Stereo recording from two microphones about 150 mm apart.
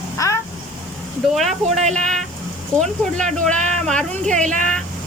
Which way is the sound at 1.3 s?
Centre (ahead or behind).